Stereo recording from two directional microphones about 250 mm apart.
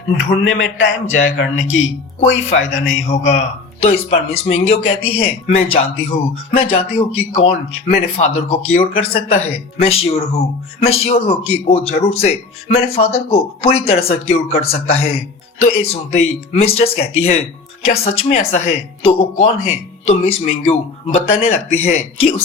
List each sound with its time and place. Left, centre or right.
0.4 s speech: left
3.1 s speech: left